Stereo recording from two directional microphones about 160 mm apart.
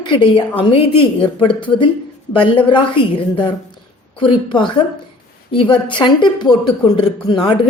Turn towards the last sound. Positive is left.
turn(degrees=30)  # may be behind; listen again after turning